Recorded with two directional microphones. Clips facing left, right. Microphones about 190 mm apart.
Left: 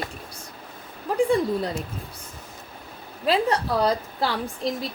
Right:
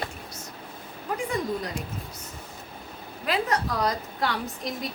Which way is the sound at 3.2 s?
30° left (ahead or behind).